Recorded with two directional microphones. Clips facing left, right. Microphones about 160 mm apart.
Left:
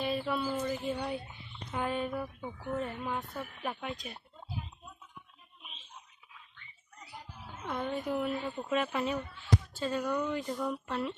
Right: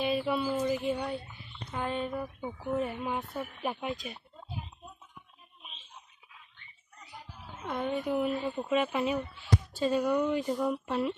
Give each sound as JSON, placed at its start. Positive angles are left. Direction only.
{"t": 0.0, "sound": "a sound", "side_deg": -5}
{"t": 0.9, "sound": "mantra", "side_deg": 0}
{"t": 1.7, "sound": "speech", "side_deg": 10}
{"t": 2.1, "sound": "mantra", "side_deg": -5}
{"t": 2.7, "sound": "speech", "side_deg": -15}
{"t": 3.9, "sound": "mantra", "side_deg": -5}
{"t": 7.6, "sound": "speech", "side_deg": 0}